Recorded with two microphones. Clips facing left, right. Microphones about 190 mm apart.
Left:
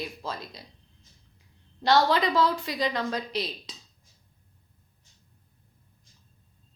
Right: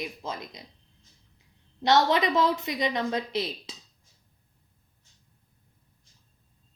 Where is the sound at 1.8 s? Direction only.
20° right (ahead or behind).